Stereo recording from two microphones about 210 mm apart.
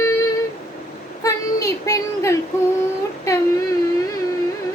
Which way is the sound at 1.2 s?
15° left (ahead or behind).